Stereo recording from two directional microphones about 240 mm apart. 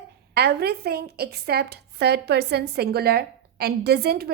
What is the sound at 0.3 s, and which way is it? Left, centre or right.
A woman's voice, right.